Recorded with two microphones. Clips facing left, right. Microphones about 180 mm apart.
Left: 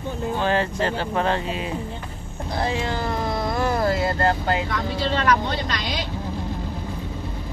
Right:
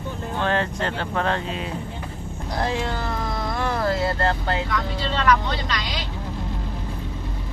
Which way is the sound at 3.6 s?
10° left (ahead or behind).